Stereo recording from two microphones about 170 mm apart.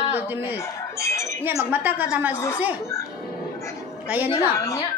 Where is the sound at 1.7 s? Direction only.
10° right (ahead or behind).